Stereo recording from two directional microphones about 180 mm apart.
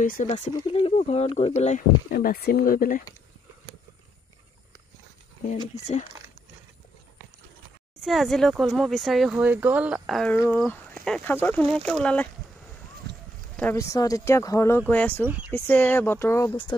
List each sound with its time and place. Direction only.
0.0 s speech: 50° left (ahead or behind)
0.3 s speech: 30° left (ahead or behind)
2.0 s speech: 55° left (ahead or behind)
8.0 s speech: centre (ahead or behind)
10.3 s speech: 10° left (ahead or behind)
13.6 s speech: 15° left (ahead or behind)